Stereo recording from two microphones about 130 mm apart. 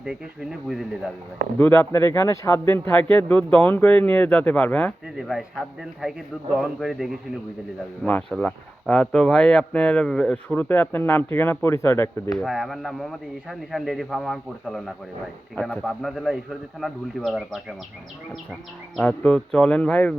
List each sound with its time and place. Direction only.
0.7 s speech: centre (ahead or behind)
1.5 s speech: 15° left (ahead or behind)
5.0 s speech: 5° right (ahead or behind); by 12.3 s 20° left (ahead or behind)
12.3 s speech: centre (ahead or behind)
18.9 s speech: 5° left (ahead or behind)